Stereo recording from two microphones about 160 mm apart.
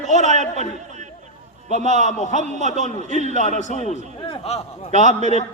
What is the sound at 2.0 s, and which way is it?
A man's voice, 45° left (ahead or behind).